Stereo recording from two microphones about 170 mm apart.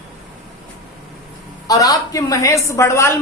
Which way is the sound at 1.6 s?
20° left (ahead or behind).